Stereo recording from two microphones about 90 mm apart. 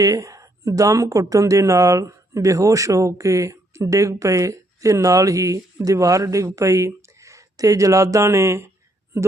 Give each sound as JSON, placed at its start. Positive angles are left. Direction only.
{"t": 0.0, "sound": "speech", "side_deg": -40}